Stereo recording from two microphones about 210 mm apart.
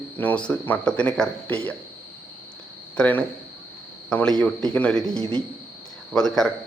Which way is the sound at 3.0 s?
10° left (ahead or behind).